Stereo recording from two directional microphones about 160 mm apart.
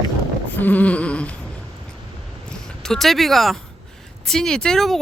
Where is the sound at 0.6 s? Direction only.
10° left (ahead or behind).